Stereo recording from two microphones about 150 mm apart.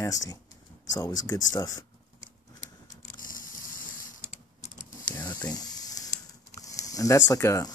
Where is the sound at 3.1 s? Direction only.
65° left (ahead or behind).